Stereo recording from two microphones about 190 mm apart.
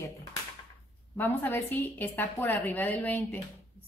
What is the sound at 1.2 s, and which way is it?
A woman's voice, 10° left (ahead or behind).